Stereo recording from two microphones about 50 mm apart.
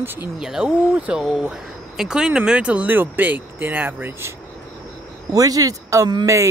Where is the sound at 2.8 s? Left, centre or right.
Right.